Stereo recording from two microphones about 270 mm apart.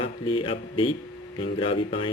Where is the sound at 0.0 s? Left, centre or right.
Centre.